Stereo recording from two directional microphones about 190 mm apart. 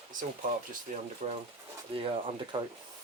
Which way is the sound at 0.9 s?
40° right (ahead or behind).